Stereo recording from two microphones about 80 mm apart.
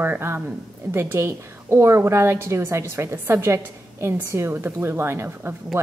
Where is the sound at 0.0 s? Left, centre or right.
Right.